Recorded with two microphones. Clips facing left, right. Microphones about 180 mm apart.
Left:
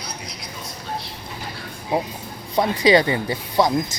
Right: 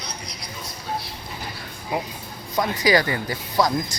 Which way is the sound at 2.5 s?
25° left (ahead or behind).